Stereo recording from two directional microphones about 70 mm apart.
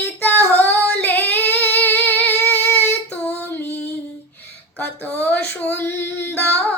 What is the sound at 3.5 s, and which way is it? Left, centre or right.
Female singing, left.